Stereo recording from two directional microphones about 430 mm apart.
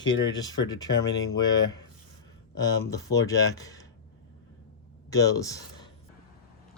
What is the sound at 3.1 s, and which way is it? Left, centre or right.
Speech, centre.